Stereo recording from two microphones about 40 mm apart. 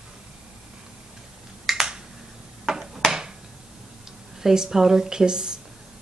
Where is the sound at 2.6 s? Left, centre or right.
Centre.